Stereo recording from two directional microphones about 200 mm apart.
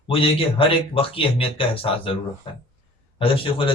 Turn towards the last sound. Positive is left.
turn(degrees=25)  # may be behind; listen again after turning